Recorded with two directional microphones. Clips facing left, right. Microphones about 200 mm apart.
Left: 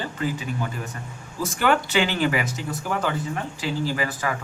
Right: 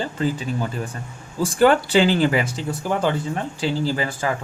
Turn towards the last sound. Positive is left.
turn(degrees=-30)  # may be behind; listen again after turning